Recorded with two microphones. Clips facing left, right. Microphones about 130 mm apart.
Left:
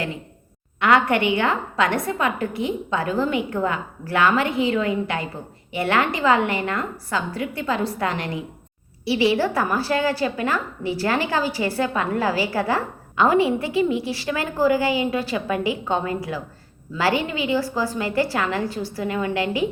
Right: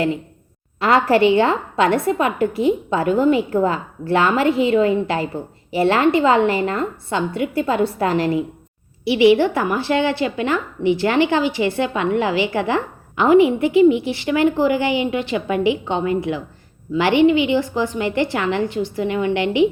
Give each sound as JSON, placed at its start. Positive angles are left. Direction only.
{"t": 0.8, "sound": "a woman's voice", "side_deg": -30}
{"t": 9.6, "sound": "a woman's voice", "side_deg": -25}